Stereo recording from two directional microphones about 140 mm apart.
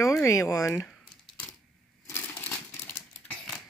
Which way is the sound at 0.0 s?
20° left (ahead or behind).